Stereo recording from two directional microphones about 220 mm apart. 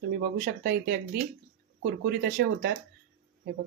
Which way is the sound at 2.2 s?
45° right (ahead or behind).